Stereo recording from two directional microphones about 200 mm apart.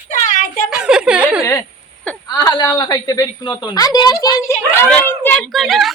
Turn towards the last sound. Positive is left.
turn(degrees=0)  # may be behind; listen again after turning